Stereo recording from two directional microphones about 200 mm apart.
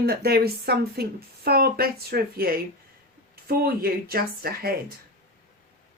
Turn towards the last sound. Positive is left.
turn(degrees=-50)  # may be behind; listen again after turning